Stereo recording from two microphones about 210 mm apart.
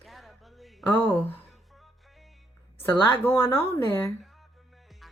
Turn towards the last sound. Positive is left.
turn(degrees=10)  # may be behind; listen again after turning